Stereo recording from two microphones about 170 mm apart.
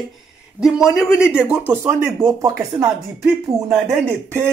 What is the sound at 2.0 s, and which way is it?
Speech, 15° right (ahead or behind).